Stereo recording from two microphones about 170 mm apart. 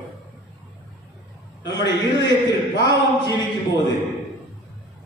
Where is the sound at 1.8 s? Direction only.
25° left (ahead or behind).